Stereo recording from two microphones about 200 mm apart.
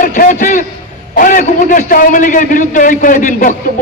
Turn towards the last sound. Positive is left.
turn(degrees=40)  # may be behind; listen again after turning